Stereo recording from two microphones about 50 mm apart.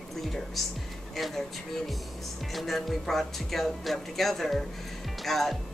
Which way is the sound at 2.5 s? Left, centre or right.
Centre.